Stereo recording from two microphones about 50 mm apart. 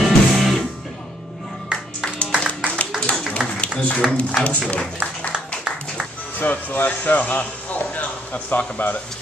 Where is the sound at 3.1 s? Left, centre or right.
Left.